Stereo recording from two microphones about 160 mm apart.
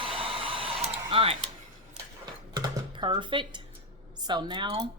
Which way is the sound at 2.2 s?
25° right (ahead or behind).